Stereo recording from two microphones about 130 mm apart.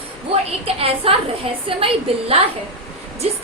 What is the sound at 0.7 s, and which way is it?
A woman's voice, 50° right (ahead or behind).